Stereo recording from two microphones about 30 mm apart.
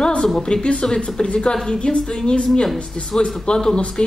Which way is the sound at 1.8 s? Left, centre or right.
Left.